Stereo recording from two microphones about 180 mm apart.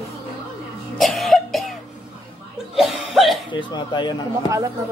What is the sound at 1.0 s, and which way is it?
Cough, centre (ahead or behind).